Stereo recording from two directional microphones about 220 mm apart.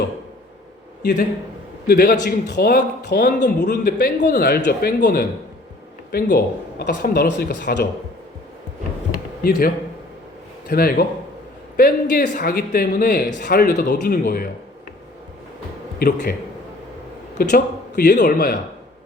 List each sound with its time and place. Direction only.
1.9 s a man's voice: 40° left (ahead or behind)
9.4 s a man's voice: 40° left (ahead or behind)
16.0 s a man's voice: 45° left (ahead or behind)
17.3 s a man's voice: 45° left (ahead or behind)